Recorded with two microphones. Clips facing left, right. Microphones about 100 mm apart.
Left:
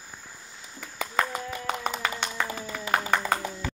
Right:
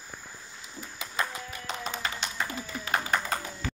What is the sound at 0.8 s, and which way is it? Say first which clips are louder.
Music: left 5 dB; 55° left (ahead or behind).